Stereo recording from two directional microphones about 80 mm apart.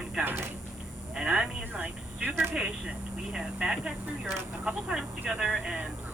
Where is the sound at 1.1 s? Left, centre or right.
Centre.